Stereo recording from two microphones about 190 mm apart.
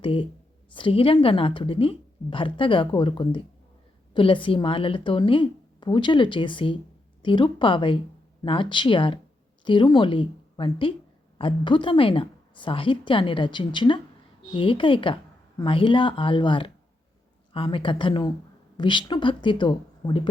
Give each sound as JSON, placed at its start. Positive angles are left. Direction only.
{"t": 0.0, "sound": "a woman's voice", "side_deg": 25}